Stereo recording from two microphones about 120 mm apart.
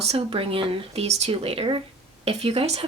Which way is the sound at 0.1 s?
50° right (ahead or behind).